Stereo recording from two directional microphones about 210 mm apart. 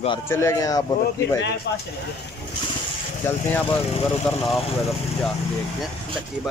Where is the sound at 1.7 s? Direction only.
55° left (ahead or behind).